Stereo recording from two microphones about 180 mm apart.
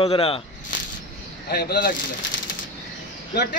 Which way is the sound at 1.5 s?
60° left (ahead or behind).